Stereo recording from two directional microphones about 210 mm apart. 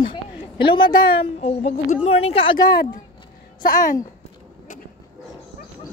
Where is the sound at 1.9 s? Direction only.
30° left (ahead or behind).